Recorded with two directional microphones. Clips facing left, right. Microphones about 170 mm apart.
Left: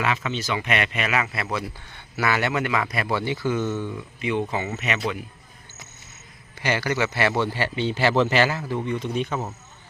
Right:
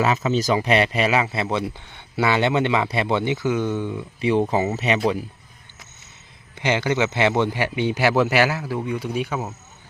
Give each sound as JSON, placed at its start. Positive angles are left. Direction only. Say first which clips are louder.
{"t": 0.0, "sound": "speech", "louder": "right 6 dB", "side_deg": -35}
{"t": 4.2, "sound": "speech", "louder": "right 6 dB", "side_deg": -35}
{"t": 6.6, "sound": "speech", "louder": "right 3 dB", "side_deg": -20}